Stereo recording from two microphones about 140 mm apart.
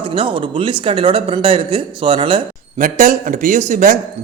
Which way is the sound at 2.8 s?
70° right (ahead or behind).